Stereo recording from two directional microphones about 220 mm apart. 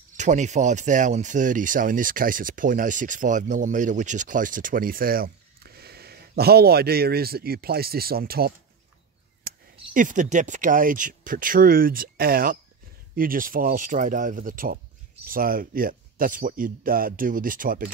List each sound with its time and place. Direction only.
0.2 s speech: 35° right (ahead or behind)
9.5 s a sound: 45° right (ahead or behind)
9.9 s speech: 35° right (ahead or behind)